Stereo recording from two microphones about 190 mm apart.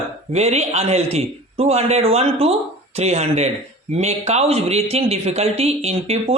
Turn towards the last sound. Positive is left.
turn(degrees=-35)  # may be behind; listen again after turning